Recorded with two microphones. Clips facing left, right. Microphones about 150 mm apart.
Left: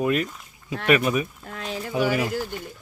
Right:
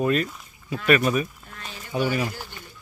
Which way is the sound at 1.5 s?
90° left.